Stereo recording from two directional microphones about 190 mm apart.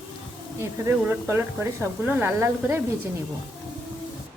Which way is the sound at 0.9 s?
10° right (ahead or behind).